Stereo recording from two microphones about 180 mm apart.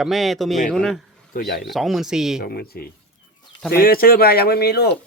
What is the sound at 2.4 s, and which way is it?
Speech, 60° left (ahead or behind).